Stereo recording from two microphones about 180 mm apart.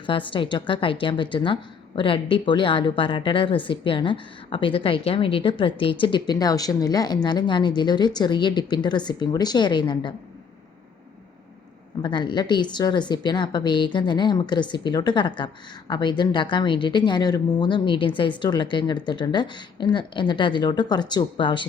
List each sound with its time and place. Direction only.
0.0 s a woman's voice: 30° left (ahead or behind)
12.0 s a woman's voice: 25° left (ahead or behind)